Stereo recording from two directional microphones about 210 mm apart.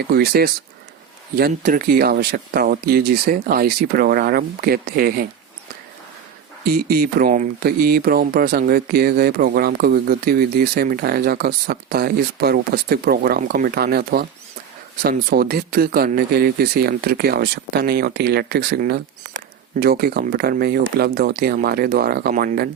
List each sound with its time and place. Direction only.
0.0 s speech: 50° right (ahead or behind)
6.7 s speech: 45° right (ahead or behind)